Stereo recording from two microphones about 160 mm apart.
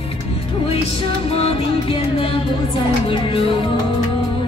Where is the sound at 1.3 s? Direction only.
35° left (ahead or behind).